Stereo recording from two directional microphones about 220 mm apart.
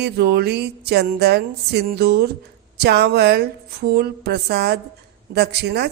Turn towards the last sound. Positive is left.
turn(degrees=-50)  # may be behind; listen again after turning